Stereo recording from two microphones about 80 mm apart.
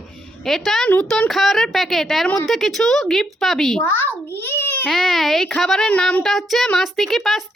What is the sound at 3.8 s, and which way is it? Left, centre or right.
Speech, left.